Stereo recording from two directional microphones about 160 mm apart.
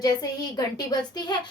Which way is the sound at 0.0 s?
25° left (ahead or behind).